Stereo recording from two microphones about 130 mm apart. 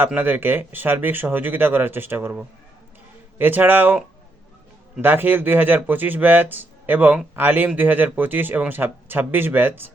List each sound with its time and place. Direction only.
0.0 s speech: 15° right (ahead or behind)